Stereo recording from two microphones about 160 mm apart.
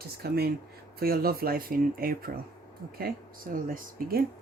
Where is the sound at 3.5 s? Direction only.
60° right (ahead or behind).